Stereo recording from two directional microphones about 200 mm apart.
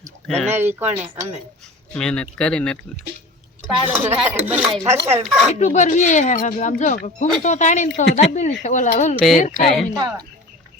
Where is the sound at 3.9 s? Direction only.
10° right (ahead or behind).